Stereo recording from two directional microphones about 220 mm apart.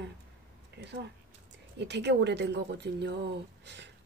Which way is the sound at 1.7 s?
50° right (ahead or behind).